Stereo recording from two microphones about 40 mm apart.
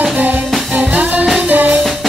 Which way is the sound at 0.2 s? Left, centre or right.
Right.